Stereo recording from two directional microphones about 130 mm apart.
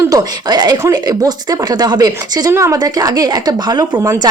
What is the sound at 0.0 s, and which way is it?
Speech, 25° right (ahead or behind).